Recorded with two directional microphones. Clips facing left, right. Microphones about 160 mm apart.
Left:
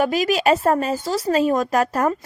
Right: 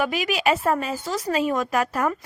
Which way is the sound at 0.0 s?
40° left (ahead or behind).